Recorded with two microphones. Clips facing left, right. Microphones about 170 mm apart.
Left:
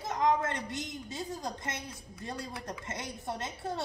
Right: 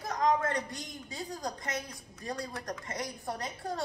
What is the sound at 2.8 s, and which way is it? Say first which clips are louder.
A woman's voice: right 1 dB; 25° left (ahead or behind).